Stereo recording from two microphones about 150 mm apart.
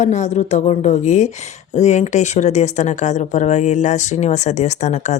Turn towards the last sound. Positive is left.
turn(degrees=50)  # may be behind; listen again after turning